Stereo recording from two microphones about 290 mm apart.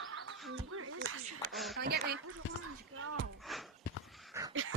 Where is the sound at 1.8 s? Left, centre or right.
Right.